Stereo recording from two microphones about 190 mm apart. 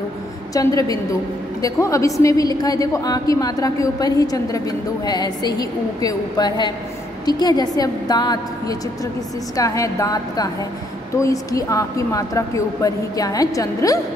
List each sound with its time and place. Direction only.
0.6 s a woman's voice: 20° left (ahead or behind)